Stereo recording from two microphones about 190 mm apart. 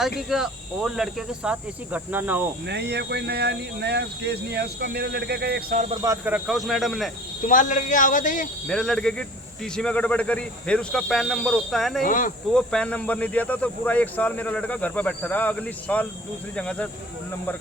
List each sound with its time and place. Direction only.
0.2 s speech: centre (ahead or behind)
2.6 s speech: 60° right (ahead or behind)
6.0 s speech: 10° right (ahead or behind)
7.4 s speech: 45° left (ahead or behind)
8.6 s speech: centre (ahead or behind)
12.0 s speech: 45° left (ahead or behind)
12.5 s speech: 5° left (ahead or behind)